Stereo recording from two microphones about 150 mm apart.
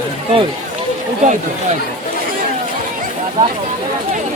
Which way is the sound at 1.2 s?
55° right (ahead or behind).